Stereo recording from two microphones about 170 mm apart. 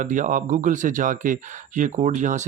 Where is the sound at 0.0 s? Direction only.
50° right (ahead or behind).